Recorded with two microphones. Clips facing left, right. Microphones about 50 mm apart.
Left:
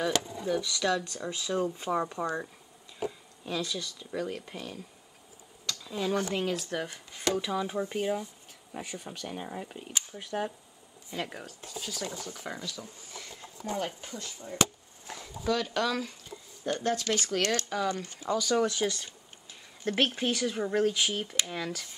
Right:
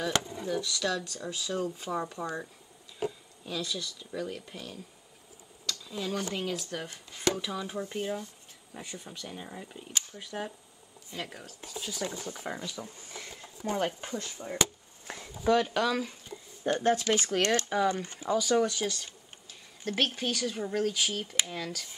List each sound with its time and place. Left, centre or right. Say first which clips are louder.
0.7 s speech: left 3 dB; centre
3.4 s speech: left 2 dB; centre
5.7 s a sound: left 3 dB; centre
6.3 s speech: left 3 dB; centre
12.3 s speech: right 1 dB; centre
13.7 s speech: right 3 dB; right
15.4 s speech: right 4 dB; right
15.7 s speech: right 1 dB; centre
16.6 s speech: right 3 dB; centre
18.3 s speech: right 1 dB; centre
18.8 s speech: left 3 dB; centre
19.8 s speech: left 2 dB; left; by 21.8 s centre